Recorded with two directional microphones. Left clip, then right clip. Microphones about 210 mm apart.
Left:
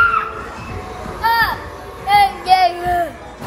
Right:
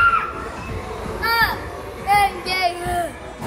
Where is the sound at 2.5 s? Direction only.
40° left (ahead or behind).